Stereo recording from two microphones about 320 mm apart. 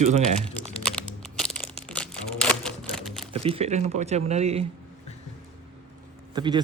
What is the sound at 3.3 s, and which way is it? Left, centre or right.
Speech, centre.